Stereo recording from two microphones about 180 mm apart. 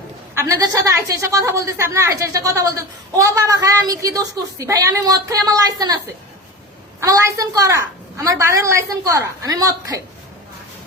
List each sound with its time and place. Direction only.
0.3 s a woman's voice: 20° right (ahead or behind)
7.0 s a woman's voice: 20° right (ahead or behind)